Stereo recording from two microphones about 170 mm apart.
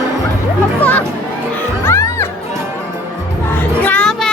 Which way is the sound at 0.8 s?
10° left (ahead or behind).